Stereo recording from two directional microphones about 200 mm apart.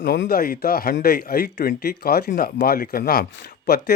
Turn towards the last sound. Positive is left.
turn(degrees=50)  # may be behind; listen again after turning